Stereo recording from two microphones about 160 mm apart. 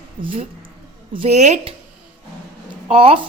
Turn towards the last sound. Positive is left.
turn(degrees=-35)  # may be behind; listen again after turning